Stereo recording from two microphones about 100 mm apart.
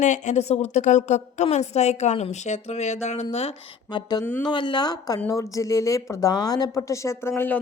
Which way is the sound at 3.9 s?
45° left (ahead or behind).